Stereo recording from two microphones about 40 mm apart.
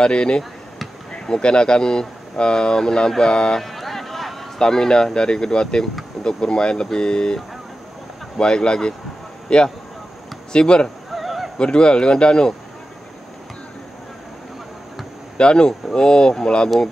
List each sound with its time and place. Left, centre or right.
0.0 s speech: left
3.6 s a sound: centre
4.6 s speech: centre
8.4 s speech: left
11.1 s a sound: centre
11.5 s speech: left
15.3 s speech: left